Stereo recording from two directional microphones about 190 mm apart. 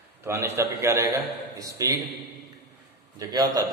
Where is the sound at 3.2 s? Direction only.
20° right (ahead or behind).